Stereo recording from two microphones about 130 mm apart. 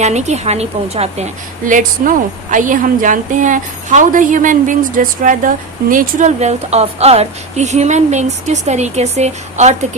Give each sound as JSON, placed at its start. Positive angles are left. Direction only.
{"t": 0.0, "sound": "a woman's voice", "side_deg": -60}